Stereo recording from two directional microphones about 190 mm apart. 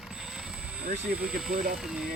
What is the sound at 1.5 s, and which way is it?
Speech, 55° right (ahead or behind).